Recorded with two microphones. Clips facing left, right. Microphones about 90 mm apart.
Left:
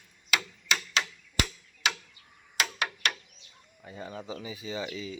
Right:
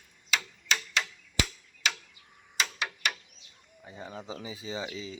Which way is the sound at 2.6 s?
60° left (ahead or behind).